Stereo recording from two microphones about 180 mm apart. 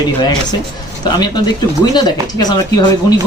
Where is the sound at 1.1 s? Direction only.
25° left (ahead or behind).